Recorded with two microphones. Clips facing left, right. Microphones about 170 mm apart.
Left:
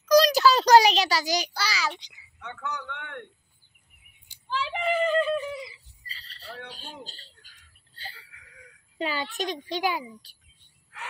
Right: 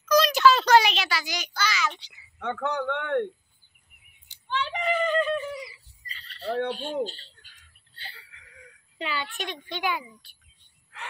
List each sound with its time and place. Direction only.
0.1 s a sound: 35° left (ahead or behind)
1.9 s a child's voice: 15° left (ahead or behind)
2.3 s speech: 55° right (ahead or behind)
4.3 s speech: 5° left (ahead or behind)
5.6 s squawk: 30° left (ahead or behind)
6.4 s speech: 50° right (ahead or behind)
7.1 s bird: 40° left (ahead or behind)
8.1 s a sound: 10° left (ahead or behind)
8.9 s a child's voice: 40° left (ahead or behind)